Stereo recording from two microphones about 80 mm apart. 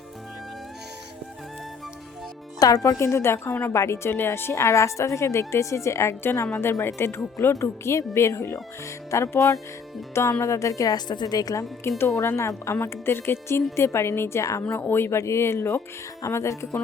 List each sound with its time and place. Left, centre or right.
2.6 s speech: left
3.0 s a woman's voice: left
11.8 s a woman's voice: left